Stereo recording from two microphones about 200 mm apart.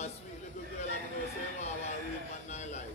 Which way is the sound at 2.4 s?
35° left (ahead or behind).